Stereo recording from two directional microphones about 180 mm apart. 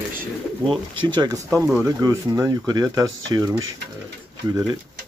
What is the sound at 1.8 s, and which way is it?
Speech, 15° right (ahead or behind).